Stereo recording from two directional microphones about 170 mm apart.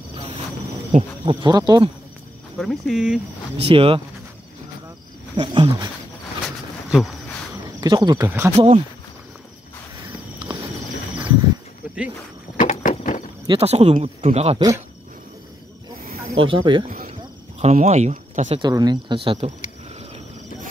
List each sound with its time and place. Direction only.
1.2 s speech: 25° right (ahead or behind)
2.5 s speech: centre (ahead or behind)
3.5 s speech: 35° right (ahead or behind)
5.3 s speech: 30° right (ahead or behind)
6.4 s a sound: centre (ahead or behind)
7.8 s speech: 25° right (ahead or behind)
8.5 s speech: 40° right (ahead or behind)
10.5 s a sound: 25° right (ahead or behind)
12.5 s a sound: 50° left (ahead or behind)
13.5 s speech: 35° right (ahead or behind)
16.3 s speech: 30° right (ahead or behind)
17.6 s speech: 40° right (ahead or behind)
18.5 s speech: 25° right (ahead or behind)